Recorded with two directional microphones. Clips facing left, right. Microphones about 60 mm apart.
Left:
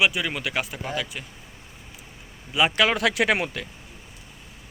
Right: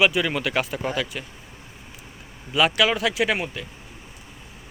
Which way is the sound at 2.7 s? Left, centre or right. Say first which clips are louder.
Right 1 dB; left.